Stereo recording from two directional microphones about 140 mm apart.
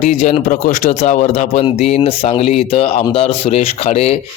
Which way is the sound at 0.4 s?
70° left (ahead or behind).